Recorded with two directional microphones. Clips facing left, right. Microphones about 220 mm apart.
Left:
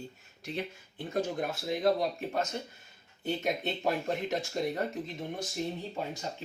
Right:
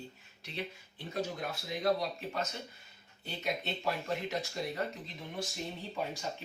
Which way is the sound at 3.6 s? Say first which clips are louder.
Left 5 dB; 50° left (ahead or behind).